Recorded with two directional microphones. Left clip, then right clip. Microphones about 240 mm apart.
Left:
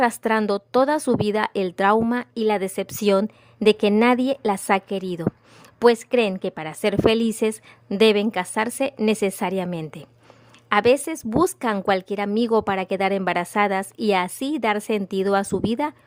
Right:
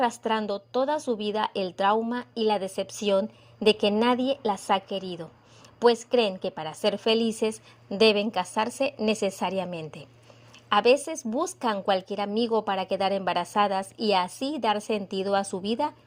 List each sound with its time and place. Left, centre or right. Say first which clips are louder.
0.0 s a woman's voice: left 5 dB; left